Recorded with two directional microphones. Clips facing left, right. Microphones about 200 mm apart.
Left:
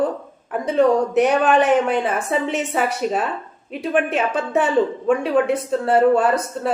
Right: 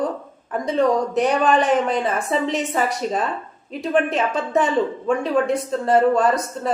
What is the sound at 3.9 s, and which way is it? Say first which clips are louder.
Speech: even; 5° left (ahead or behind).